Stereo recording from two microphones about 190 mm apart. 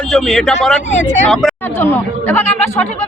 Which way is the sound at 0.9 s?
35° left (ahead or behind).